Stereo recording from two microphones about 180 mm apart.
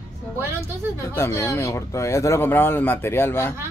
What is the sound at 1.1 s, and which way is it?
Speech, 15° left (ahead or behind).